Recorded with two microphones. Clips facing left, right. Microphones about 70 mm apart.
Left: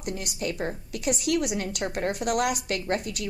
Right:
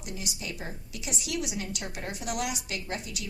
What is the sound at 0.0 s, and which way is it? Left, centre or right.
A woman's voice, left.